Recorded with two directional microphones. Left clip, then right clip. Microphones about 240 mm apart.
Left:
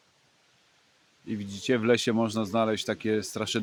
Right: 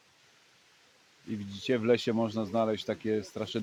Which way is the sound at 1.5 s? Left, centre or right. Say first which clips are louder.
Left 3 dB; left.